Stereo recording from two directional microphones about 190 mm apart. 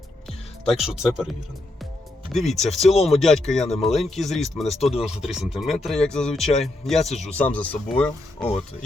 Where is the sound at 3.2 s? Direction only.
Centre (ahead or behind).